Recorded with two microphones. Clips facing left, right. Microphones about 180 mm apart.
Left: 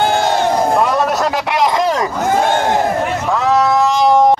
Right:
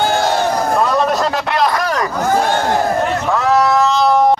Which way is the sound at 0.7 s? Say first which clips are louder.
Even; 10° left (ahead or behind).